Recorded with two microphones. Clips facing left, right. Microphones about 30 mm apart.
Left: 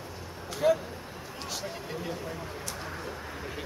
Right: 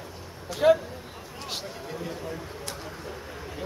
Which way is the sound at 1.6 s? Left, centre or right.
Centre.